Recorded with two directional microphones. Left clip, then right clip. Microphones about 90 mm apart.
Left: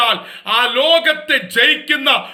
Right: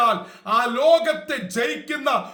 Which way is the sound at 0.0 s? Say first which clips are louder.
Left 4 dB; 35° right (ahead or behind).